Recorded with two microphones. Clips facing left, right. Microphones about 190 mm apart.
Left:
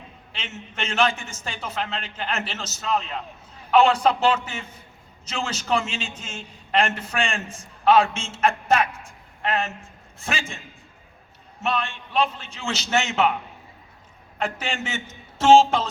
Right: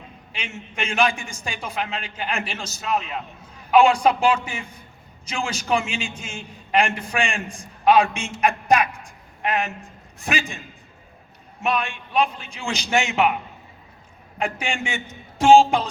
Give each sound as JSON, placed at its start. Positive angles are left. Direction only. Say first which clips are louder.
{"t": 0.3, "sound": "a man's voice", "louder": "right 2 dB", "side_deg": -10}
{"t": 11.6, "sound": "a man's voice", "louder": "right 2 dB", "side_deg": -15}
{"t": 14.3, "sound": "a man's voice", "louder": "right 2 dB", "side_deg": -10}